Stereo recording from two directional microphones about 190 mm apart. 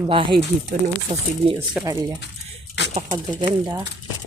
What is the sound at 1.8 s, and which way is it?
Speech, 20° right (ahead or behind).